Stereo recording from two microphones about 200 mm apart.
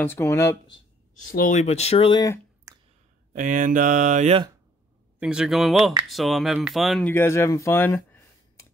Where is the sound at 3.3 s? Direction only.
40° right (ahead or behind).